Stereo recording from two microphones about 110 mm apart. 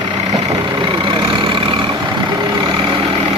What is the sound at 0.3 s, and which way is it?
Vehicle, 45° right (ahead or behind).